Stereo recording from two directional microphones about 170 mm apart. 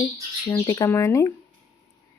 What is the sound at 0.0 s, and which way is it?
Speech, 20° left (ahead or behind).